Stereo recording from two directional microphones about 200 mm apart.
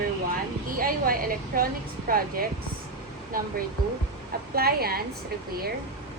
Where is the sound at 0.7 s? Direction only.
45° right (ahead or behind).